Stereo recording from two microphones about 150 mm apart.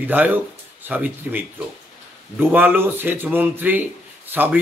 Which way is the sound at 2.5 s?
15° right (ahead or behind).